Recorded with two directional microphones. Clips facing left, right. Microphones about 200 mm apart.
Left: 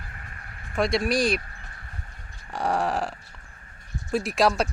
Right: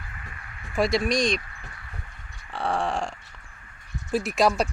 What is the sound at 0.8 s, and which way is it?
Speech, centre (ahead or behind).